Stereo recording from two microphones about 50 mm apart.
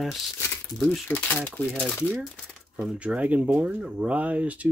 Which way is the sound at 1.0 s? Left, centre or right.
Left.